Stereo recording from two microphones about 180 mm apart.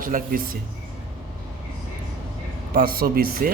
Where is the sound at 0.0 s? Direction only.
50° right (ahead or behind).